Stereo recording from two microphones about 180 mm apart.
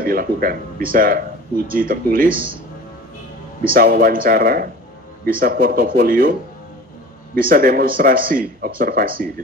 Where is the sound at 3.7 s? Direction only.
55° right (ahead or behind).